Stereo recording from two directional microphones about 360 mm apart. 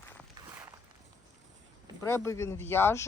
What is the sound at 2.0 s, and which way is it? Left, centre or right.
Speech, centre.